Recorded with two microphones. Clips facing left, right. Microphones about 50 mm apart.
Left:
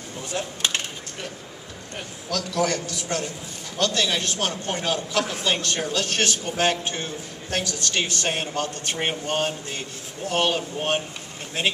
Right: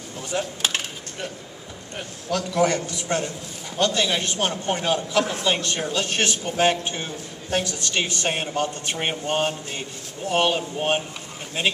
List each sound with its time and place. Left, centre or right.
0.3 s coin: centre
2.3 s a man's voice: right